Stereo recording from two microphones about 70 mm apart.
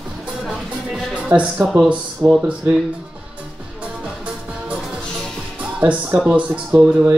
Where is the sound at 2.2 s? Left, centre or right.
Right.